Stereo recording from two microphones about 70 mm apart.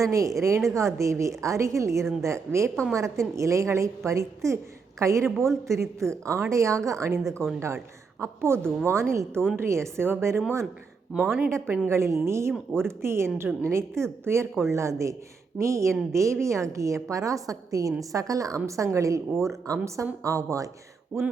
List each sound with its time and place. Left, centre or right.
0.0 s a woman's voice: right
11.1 s speech: centre
11.9 s a woman's voice: right
21.1 s speech: centre